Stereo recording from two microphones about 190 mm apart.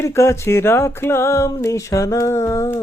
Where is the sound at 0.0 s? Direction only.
15° left (ahead or behind).